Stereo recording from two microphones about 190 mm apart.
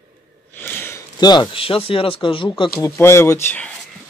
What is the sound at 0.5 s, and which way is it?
Speech, 10° left (ahead or behind).